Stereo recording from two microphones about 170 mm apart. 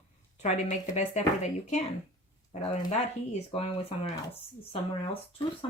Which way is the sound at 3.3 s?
35° left (ahead or behind).